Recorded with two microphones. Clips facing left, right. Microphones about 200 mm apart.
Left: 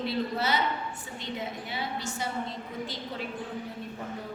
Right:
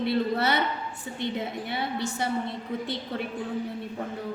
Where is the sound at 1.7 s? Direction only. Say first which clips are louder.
Right 4 dB; 60° right (ahead or behind).